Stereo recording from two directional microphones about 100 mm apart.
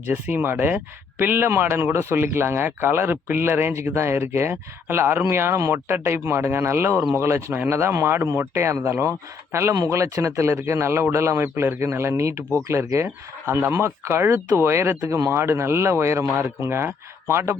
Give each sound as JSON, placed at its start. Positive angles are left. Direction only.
{"t": 0.0, "sound": "a man's voice", "side_deg": -20}